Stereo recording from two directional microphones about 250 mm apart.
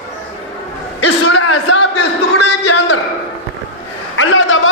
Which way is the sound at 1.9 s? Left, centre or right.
Left.